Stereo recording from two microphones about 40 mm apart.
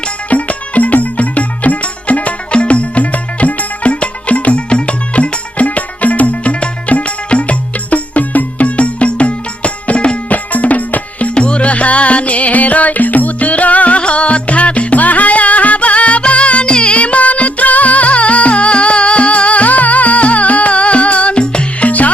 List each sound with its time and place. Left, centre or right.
0.3 s music: left
10.3 s music: left
11.3 s music: left
21.8 s music: left